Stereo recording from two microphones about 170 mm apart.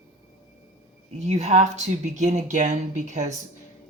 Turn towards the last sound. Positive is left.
turn(degrees=-45)  # may be behind; listen again after turning